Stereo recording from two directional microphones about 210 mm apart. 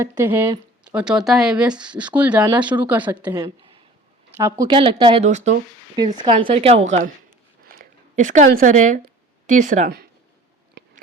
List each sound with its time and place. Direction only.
0.0 s speech: 10° right (ahead or behind)
2.4 s speech: 20° right (ahead or behind)
2.8 s speech: 5° right (ahead or behind)
3.3 s speech: 20° right (ahead or behind); by 5.5 s 35° right (ahead or behind)
6.1 s speech: 25° right (ahead or behind)
7.7 s a sound: 40° right (ahead or behind)
8.4 s speech: 40° right (ahead or behind)